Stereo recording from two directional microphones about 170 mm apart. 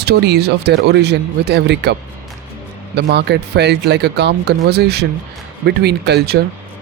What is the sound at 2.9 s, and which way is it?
Speech, 80° right.